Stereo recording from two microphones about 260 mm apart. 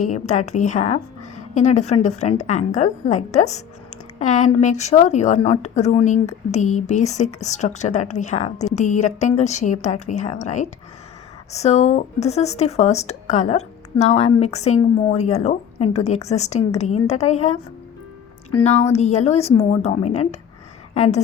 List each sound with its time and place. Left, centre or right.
0.0 s a woman's voice: left